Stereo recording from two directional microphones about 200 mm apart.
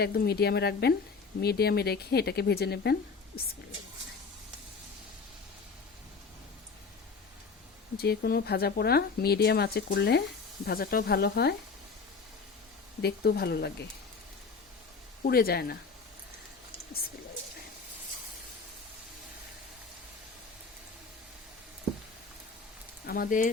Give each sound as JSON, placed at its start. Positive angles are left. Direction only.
{"t": 0.0, "sound": "speech", "side_deg": 50}
{"t": 7.9, "sound": "speech", "side_deg": 55}
{"t": 13.0, "sound": "speech", "side_deg": 55}
{"t": 15.2, "sound": "speech", "side_deg": 50}
{"t": 23.0, "sound": "speech", "side_deg": 50}